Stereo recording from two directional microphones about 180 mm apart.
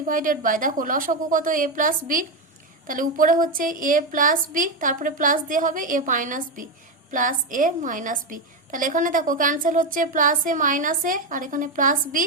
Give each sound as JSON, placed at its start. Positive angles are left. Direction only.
{"t": 0.0, "sound": "a woman's voice", "side_deg": -50}